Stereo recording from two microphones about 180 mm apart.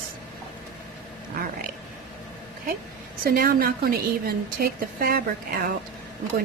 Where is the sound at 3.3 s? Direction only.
55° right (ahead or behind).